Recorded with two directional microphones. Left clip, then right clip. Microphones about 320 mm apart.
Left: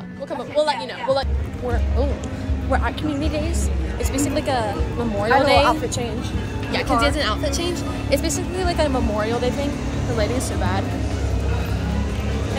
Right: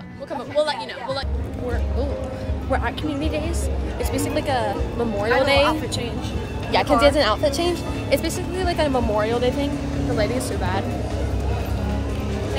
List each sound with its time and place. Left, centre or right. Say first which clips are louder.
0.6 s speech: left 2 dB; centre
2.7 s speech: left 1 dB; centre
6.7 s speech: right 3 dB; centre
7.6 s speech: right 1 dB; centre